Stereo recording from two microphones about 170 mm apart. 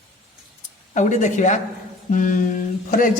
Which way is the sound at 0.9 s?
45° left (ahead or behind).